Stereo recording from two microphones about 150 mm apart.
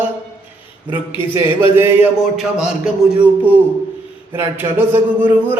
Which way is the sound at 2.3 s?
5° right (ahead or behind).